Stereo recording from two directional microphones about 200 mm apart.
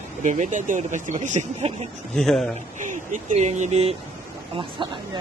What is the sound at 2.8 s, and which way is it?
Speech, 40° right (ahead or behind).